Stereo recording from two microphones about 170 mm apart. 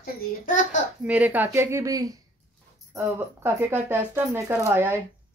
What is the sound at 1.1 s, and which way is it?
A woman's voice, 10° right (ahead or behind).